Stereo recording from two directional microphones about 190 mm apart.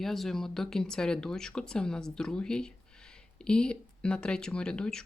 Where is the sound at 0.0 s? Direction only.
Centre (ahead or behind).